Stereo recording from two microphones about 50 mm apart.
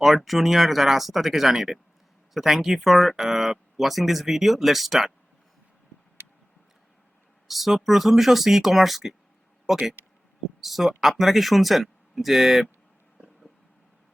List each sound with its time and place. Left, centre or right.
0.0 s speech: centre
6.2 s tick: right
7.4 s speech: centre